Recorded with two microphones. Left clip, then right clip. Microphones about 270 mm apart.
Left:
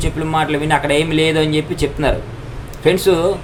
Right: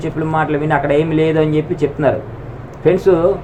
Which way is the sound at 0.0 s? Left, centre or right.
Left.